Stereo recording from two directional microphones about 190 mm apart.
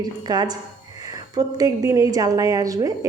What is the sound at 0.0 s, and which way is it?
A woman's voice, 20° right (ahead or behind).